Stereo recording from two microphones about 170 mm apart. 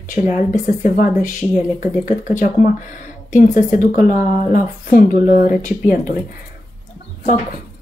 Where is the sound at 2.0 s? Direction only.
45° left (ahead or behind).